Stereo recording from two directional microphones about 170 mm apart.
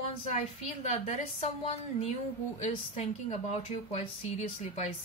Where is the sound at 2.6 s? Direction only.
40° left (ahead or behind).